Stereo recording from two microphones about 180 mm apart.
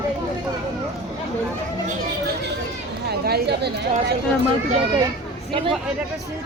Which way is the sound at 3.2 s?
60° right (ahead or behind).